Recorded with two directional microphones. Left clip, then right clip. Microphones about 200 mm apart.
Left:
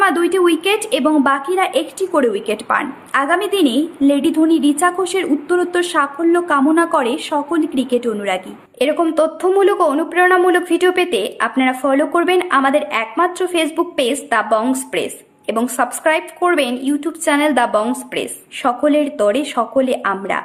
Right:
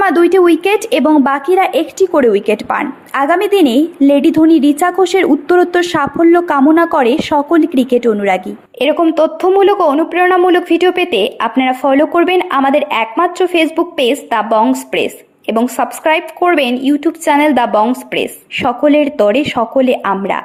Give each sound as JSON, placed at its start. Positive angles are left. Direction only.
{"t": 0.0, "sound": "a woman's voice", "side_deg": -30}